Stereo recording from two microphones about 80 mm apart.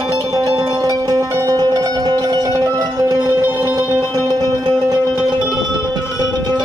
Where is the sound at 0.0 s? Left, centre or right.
Right.